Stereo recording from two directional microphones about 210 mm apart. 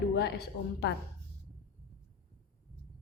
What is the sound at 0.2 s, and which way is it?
Speech, 50° left (ahead or behind).